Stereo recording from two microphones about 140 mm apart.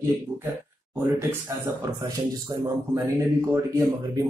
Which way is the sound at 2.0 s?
35° right (ahead or behind).